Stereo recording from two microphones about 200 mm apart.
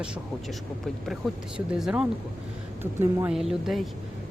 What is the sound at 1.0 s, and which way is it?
Speech, centre (ahead or behind).